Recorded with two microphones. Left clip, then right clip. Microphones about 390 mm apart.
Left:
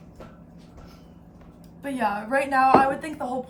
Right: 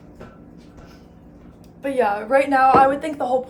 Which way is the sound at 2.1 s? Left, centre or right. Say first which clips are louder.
Right 4 dB; right.